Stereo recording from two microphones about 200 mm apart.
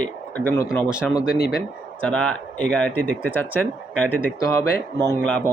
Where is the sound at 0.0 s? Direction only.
10° left (ahead or behind).